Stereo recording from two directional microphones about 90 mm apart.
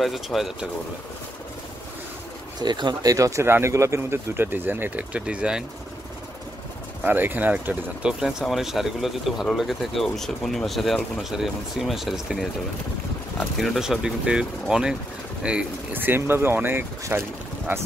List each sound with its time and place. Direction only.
0.0 s speech: centre (ahead or behind)
2.6 s speech: 55° right (ahead or behind); by 5.6 s 10° right (ahead or behind)
7.1 s speech: 20° right (ahead or behind); by 12.4 s 5° right (ahead or behind)
13.6 s speech: 5° right (ahead or behind)
15.9 s speech: 25° right (ahead or behind)